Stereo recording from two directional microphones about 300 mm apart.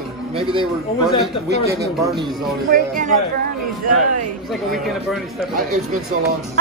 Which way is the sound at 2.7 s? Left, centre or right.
Right.